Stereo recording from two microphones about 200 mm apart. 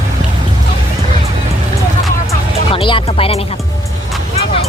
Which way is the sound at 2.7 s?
25° left (ahead or behind).